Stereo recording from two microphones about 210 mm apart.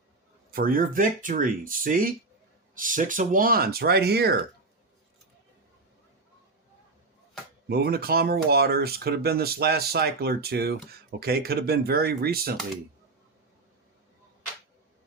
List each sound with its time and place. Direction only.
0.5 s speech: 45° right (ahead or behind)
7.7 s speech: 50° right (ahead or behind)